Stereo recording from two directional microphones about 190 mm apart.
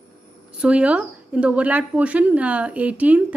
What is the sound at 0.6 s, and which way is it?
Speech, 5° right (ahead or behind).